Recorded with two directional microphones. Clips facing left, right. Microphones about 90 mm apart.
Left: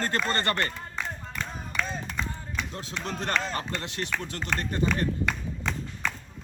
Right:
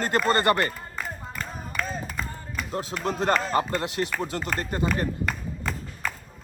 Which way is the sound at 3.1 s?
35° right (ahead or behind).